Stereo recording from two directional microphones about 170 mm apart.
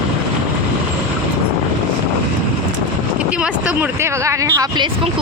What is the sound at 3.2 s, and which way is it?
Speech, 5° right (ahead or behind).